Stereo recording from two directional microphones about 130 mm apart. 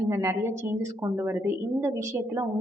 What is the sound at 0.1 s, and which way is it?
A woman's voice, 20° right (ahead or behind).